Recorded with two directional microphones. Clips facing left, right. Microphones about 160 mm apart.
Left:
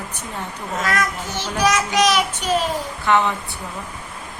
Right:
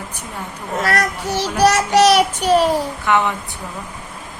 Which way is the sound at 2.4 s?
75° right (ahead or behind).